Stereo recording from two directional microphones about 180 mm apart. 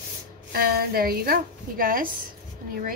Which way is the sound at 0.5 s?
55° right (ahead or behind).